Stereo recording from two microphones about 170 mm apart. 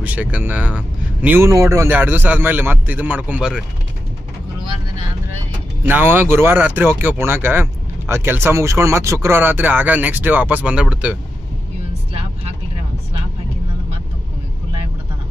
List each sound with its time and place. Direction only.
0.0 s speech: 10° right (ahead or behind)
5.9 s speech: 10° right (ahead or behind)
12.1 s vehicle: 35° right (ahead or behind)